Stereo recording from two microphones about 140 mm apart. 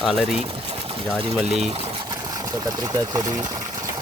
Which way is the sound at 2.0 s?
25° right (ahead or behind).